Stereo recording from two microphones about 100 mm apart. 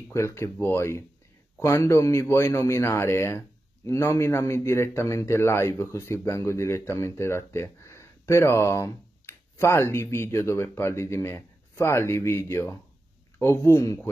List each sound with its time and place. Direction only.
0.1 s a man's voice: 25° left (ahead or behind)